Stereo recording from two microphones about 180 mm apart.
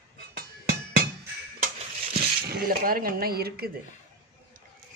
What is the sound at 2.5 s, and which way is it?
Speech, 55° right (ahead or behind).